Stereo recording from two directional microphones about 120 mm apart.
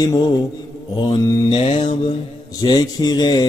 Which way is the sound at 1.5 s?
50° left (ahead or behind).